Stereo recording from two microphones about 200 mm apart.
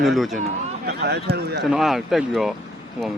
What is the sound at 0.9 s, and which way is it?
Speech, 55° right (ahead or behind).